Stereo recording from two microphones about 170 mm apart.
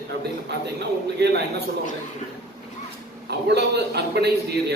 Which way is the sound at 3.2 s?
75° right (ahead or behind).